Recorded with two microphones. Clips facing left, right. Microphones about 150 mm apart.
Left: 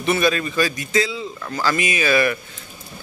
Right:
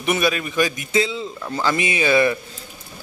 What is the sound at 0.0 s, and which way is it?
A man's voice, 10° right (ahead or behind).